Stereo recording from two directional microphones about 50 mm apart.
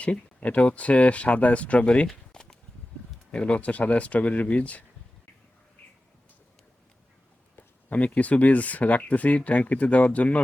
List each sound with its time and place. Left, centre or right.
0.0 s speech: left
2.0 s a sound: centre
3.3 s speech: left
7.5 s speech: left